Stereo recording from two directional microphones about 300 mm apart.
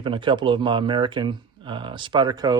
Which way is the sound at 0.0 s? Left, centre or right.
Centre.